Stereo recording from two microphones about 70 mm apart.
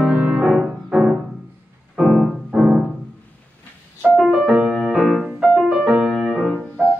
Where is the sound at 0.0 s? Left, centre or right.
Centre.